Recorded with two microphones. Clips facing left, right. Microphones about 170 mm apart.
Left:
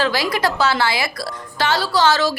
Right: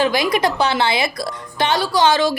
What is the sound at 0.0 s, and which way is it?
A woman's voice, 20° right (ahead or behind).